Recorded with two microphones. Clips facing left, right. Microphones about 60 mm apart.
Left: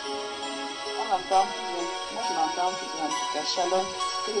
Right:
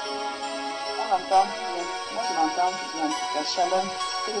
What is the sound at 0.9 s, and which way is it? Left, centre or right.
Speech, right.